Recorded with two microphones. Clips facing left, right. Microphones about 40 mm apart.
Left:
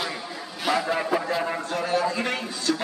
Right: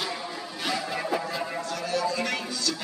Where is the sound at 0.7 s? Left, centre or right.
Centre.